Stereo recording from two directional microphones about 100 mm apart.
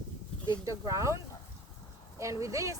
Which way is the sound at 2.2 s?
30° right (ahead or behind).